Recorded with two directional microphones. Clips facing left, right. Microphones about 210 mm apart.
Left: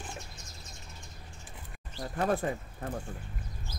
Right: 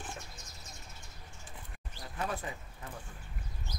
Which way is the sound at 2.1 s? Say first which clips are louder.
Left 8 dB; 50° left (ahead or behind).